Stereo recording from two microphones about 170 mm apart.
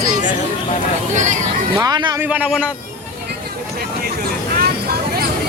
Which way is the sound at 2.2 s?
10° right (ahead or behind).